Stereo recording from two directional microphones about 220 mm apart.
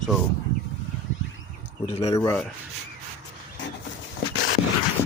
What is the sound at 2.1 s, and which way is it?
Speech, 15° left (ahead or behind).